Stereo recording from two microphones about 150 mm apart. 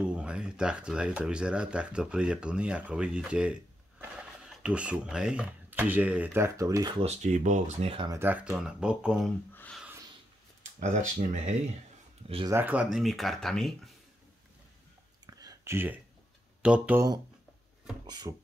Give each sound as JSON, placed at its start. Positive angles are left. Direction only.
{"t": 0.0, "sound": "speech", "side_deg": -5}
{"t": 7.0, "sound": "speech", "side_deg": -45}
{"t": 8.1, "sound": "speech", "side_deg": -15}
{"t": 9.5, "sound": "a sound", "side_deg": 10}
{"t": 10.6, "sound": "speech", "side_deg": -55}
{"t": 12.4, "sound": "speech", "side_deg": -15}
{"t": 15.2, "sound": "a sound", "side_deg": -25}
{"t": 16.6, "sound": "speech", "side_deg": -10}
{"t": 18.0, "sound": "speech", "side_deg": -25}